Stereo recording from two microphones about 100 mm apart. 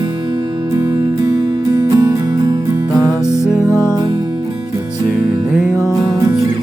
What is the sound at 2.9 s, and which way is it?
Music, 5° right (ahead or behind).